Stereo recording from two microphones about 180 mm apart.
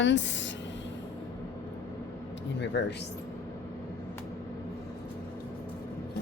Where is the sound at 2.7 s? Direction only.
70° left (ahead or behind).